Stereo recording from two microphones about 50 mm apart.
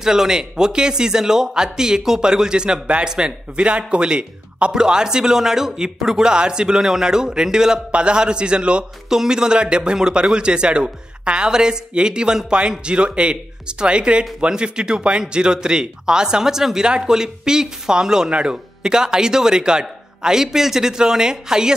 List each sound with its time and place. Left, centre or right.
0.0 s a man's voice: centre